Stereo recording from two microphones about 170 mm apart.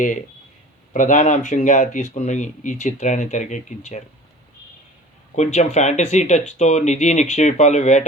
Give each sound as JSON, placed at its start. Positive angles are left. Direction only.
{"t": 0.9, "sound": "speech", "side_deg": 50}
{"t": 5.4, "sound": "speech", "side_deg": 40}